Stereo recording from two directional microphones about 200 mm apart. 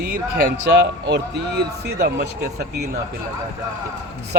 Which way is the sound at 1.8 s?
55° right (ahead or behind).